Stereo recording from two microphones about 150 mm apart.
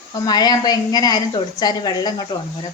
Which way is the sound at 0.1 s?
25° left (ahead or behind).